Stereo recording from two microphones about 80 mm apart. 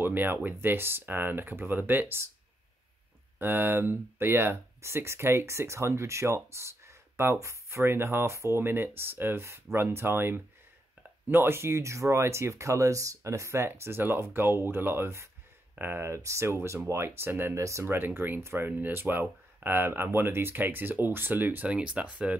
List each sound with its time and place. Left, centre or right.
0.0 s speech: right
3.3 s speech: right